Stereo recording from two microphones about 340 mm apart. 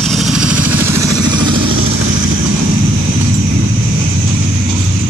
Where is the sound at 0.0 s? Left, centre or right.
Centre.